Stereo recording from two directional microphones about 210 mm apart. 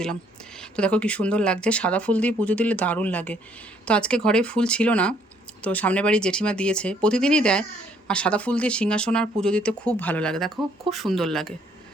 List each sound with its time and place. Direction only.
0.8 s speech: 5° left (ahead or behind)